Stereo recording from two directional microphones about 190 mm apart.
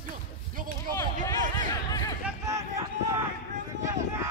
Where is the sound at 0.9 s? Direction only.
20° left (ahead or behind).